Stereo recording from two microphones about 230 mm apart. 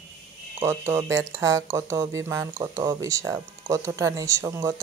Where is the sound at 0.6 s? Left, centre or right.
Centre.